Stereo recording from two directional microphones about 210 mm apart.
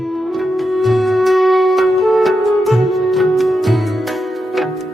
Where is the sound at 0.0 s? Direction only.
Centre (ahead or behind).